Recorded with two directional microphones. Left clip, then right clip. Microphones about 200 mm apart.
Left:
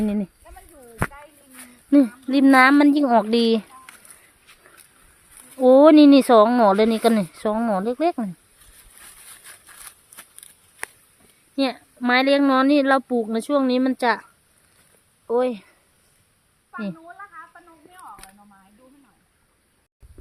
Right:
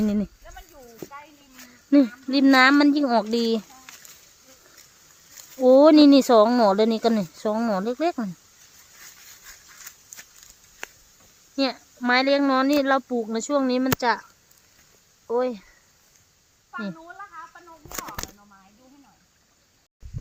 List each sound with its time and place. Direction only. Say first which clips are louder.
0.0 s speech: even; centre (ahead or behind)
1.5 s speech: left 2 dB; 10° left (ahead or behind)
5.5 s speech: left 2 dB; 5° left (ahead or behind)
11.5 s speech: left 2 dB; 15° left (ahead or behind)
15.3 s speech: left 3 dB; 20° left (ahead or behind)
17.1 s a sound: even; 45° right (ahead or behind)